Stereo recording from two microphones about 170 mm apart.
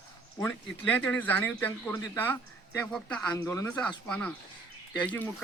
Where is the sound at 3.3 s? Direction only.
15° left (ahead or behind).